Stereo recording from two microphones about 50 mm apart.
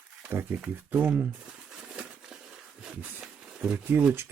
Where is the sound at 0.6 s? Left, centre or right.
Right.